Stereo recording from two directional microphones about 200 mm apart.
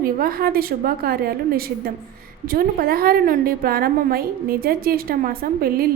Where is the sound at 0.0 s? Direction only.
50° right (ahead or behind).